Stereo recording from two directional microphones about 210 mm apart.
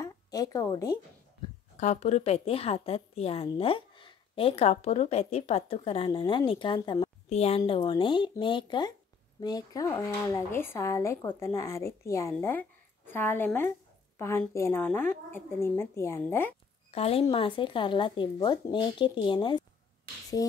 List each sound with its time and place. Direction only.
0.0 s a woman's voice: 15° left (ahead or behind)
1.8 s a woman's voice: 35° left (ahead or behind); by 16.5 s 10° left (ahead or behind)
16.9 s a woman's voice: 30° left (ahead or behind)